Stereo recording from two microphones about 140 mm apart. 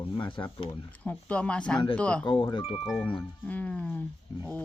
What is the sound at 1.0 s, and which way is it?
Speech, 10° left (ahead or behind).